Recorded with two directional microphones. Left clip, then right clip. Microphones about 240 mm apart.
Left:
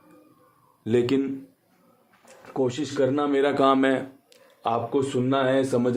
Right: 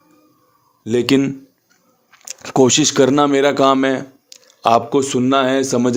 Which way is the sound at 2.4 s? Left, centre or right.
Right.